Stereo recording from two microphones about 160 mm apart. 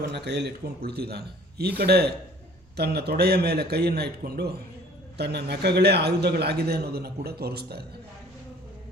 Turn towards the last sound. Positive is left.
turn(degrees=-80)